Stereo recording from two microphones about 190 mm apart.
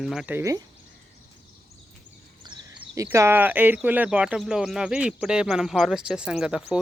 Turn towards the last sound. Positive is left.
turn(degrees=-5)  # may be behind; listen again after turning